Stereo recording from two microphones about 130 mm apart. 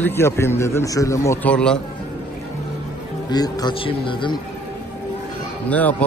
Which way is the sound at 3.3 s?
30° left (ahead or behind).